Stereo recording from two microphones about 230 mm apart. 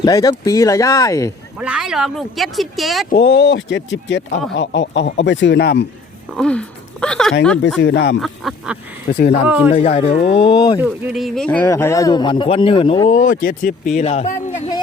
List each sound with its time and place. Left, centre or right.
0.0 s speech: centre
1.5 s speech: centre
3.1 s speech: left
6.3 s speech: centre
7.8 s speech: left
8.2 s speech: centre
9.0 s a man's voice: left
10.8 s speech: centre; by 13.7 s left
13.9 s a man's voice: left